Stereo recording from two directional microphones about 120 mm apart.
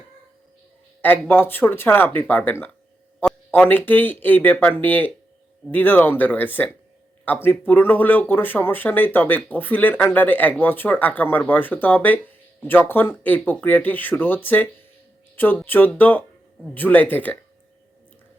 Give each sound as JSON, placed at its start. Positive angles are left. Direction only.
{"t": 1.3, "sound": "speech", "side_deg": 15}